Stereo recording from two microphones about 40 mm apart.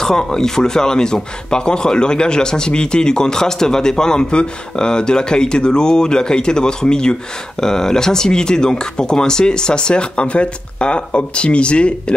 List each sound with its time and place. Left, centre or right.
0.0 s speech: centre